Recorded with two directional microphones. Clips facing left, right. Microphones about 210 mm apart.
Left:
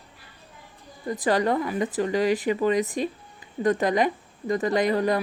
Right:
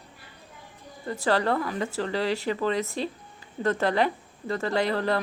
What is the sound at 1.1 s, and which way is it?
Speech, 15° left (ahead or behind).